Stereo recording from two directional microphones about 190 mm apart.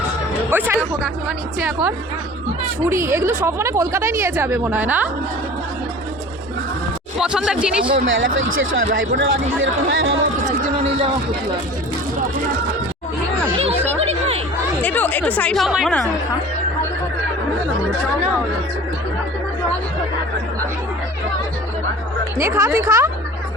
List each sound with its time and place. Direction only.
0.5 s speech: 10° right (ahead or behind)
7.2 s speech: 5° right (ahead or behind)
7.9 s speech: 90° right
8.8 s speech: 60° right (ahead or behind); by 10.1 s 90° right
14.8 s a woman's voice: 10° left (ahead or behind)
22.4 s speech: 15° right (ahead or behind)